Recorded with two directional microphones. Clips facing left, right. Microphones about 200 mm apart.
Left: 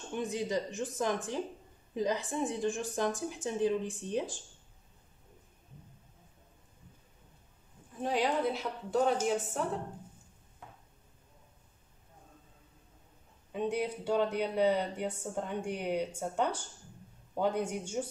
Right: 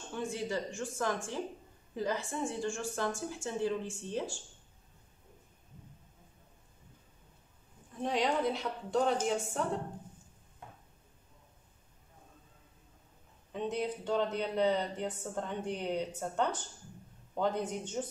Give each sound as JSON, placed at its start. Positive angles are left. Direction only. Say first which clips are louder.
{"t": 0.1, "sound": "speech", "louder": "left 3 dB", "side_deg": 20}
{"t": 7.9, "sound": "a woman's voice", "louder": "left 1 dB", "side_deg": 5}
{"t": 13.5, "sound": "speech", "louder": "left 2 dB", "side_deg": 10}